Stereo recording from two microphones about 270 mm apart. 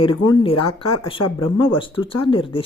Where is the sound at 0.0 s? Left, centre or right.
Centre.